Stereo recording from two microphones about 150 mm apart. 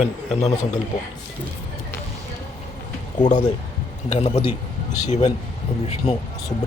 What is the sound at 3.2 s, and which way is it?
A man's voice, 50° left (ahead or behind).